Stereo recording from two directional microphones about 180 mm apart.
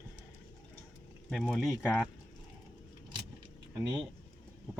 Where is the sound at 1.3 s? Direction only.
Centre (ahead or behind).